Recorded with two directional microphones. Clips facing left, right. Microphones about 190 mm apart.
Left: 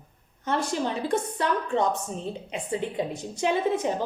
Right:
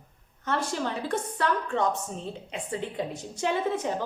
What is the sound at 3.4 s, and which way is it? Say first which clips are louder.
Speech: left 3 dB; 15° left (ahead or behind).